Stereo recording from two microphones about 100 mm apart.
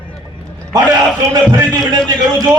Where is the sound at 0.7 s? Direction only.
40° right (ahead or behind).